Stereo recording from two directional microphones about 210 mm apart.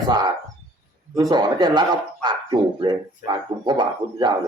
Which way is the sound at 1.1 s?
20° right (ahead or behind).